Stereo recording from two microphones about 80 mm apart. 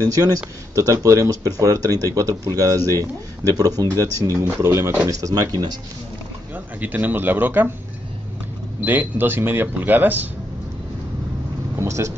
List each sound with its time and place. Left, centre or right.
0.0 s speech: right
5.0 s speech: right
6.5 s speech: right
8.8 s speech: right
11.8 s speech: right